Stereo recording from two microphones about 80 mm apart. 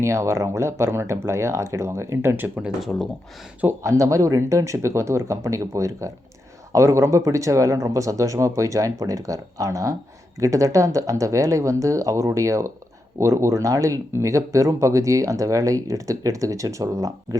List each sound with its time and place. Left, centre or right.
0.0 s speech: right
3.8 s speech: right